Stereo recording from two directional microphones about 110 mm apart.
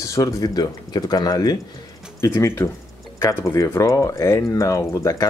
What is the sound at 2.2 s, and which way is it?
Speech, 25° left (ahead or behind).